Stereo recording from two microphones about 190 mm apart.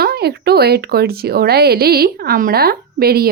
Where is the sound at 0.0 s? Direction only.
55° right (ahead or behind).